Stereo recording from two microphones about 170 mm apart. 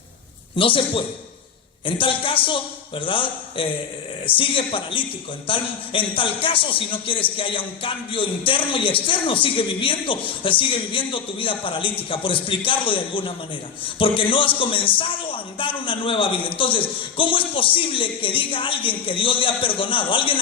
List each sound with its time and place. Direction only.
0.5 s a man's voice: 30° left (ahead or behind)